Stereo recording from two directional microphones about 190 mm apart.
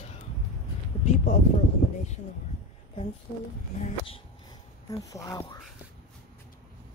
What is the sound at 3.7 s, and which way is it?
Speech, 35° left (ahead or behind).